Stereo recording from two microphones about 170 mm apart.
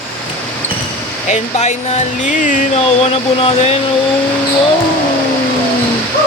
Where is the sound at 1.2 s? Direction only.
45° left (ahead or behind).